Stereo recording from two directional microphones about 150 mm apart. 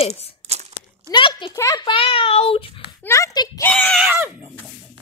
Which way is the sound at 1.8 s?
35° left (ahead or behind).